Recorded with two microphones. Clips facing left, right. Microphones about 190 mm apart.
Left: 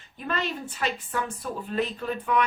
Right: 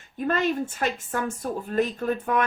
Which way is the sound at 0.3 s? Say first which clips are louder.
Right 6 dB; 45° right (ahead or behind).